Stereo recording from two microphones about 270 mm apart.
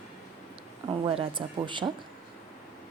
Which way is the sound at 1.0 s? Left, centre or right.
Centre.